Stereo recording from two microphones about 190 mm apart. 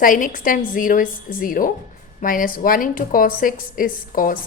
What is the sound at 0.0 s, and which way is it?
A woman's voice, 45° left (ahead or behind).